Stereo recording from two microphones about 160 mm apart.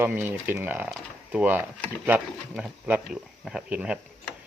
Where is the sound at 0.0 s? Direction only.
10° right (ahead or behind).